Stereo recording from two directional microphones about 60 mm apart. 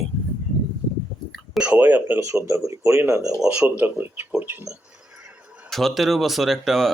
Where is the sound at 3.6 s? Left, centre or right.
Right.